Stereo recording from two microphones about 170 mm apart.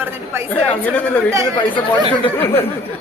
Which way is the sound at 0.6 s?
10° left (ahead or behind).